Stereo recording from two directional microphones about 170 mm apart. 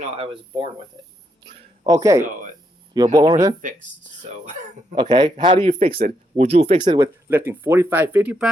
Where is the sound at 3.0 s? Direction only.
25° right (ahead or behind).